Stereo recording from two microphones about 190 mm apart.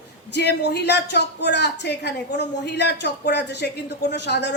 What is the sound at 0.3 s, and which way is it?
A woman's voice, 65° left (ahead or behind).